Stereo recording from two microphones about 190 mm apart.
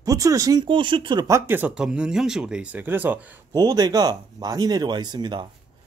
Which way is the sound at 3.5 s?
20° right (ahead or behind).